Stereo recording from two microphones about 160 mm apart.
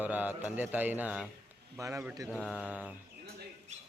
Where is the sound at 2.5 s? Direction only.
10° right (ahead or behind).